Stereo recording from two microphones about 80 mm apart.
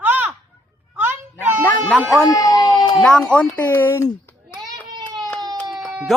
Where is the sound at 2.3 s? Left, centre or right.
Left.